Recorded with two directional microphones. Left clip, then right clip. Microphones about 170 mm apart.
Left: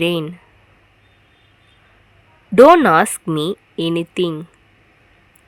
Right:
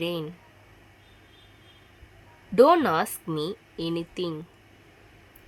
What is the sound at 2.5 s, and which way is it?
Speech, 45° left (ahead or behind).